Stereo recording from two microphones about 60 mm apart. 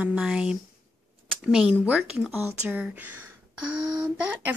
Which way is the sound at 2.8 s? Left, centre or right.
Right.